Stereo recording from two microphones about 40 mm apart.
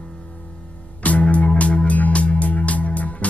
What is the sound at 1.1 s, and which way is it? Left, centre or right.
Music, left.